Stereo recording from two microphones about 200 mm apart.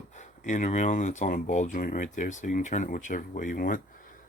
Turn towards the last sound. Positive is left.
turn(degrees=45)  # may be behind; listen again after turning